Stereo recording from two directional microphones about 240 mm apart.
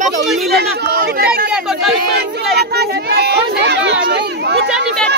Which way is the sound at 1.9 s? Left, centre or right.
Right.